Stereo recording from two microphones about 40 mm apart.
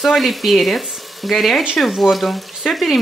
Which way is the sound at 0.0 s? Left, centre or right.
Centre.